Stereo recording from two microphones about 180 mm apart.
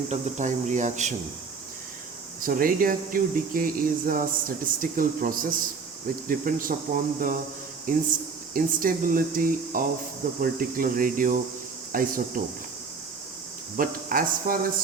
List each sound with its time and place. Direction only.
0.1 s speech: 45° right (ahead or behind)
2.4 s speech: 50° right (ahead or behind)
8.5 s speech: 50° right (ahead or behind)
11.9 s insect: 50° right (ahead or behind)
13.7 s speech: 50° right (ahead or behind)